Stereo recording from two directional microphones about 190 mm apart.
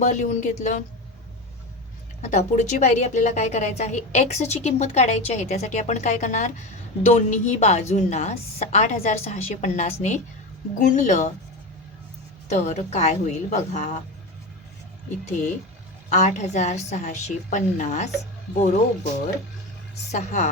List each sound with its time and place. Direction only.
0.0 s a woman's voice: 40° left (ahead or behind)
2.2 s a woman's voice: 40° left (ahead or behind)
12.5 s a woman's voice: 40° left (ahead or behind)
16.0 s a woman's voice: 35° left (ahead or behind)
20.1 s a woman's voice: 40° left (ahead or behind)